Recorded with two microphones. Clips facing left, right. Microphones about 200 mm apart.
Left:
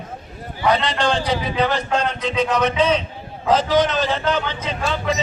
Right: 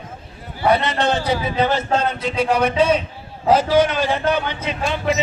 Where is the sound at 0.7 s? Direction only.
10° right (ahead or behind).